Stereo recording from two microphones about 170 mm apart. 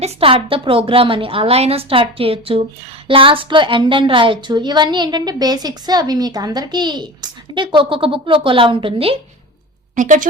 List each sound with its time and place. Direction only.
0.0 s a woman's voice: 35° right (ahead or behind)
9.9 s a woman's voice: 50° right (ahead or behind)